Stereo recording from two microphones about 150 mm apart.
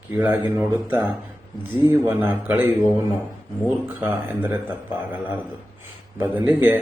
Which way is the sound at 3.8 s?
15° right (ahead or behind).